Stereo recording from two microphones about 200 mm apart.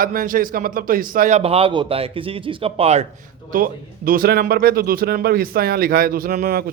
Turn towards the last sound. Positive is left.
turn(degrees=-45)  # may be behind; listen again after turning